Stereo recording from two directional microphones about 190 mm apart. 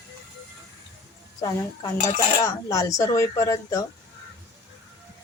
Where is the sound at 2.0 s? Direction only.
15° left (ahead or behind).